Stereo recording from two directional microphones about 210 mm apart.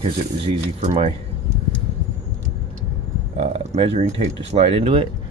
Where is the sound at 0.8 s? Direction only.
30° right (ahead or behind).